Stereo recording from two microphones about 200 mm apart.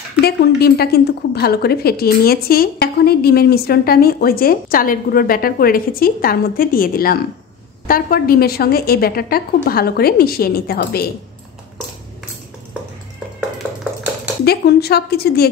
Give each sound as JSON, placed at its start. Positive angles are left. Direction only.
{"t": 0.6, "sound": "a woman's voice", "side_deg": 50}
{"t": 13.6, "sound": "a sound", "side_deg": -10}
{"t": 14.4, "sound": "a woman's voice", "side_deg": 55}